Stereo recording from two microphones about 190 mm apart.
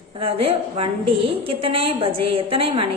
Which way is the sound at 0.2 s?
30° right (ahead or behind).